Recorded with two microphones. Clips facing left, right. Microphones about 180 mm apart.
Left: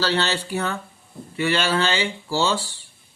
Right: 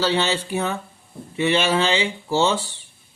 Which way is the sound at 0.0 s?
15° right (ahead or behind).